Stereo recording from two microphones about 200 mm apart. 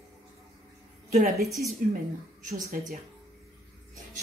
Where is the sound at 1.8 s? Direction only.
40° right (ahead or behind).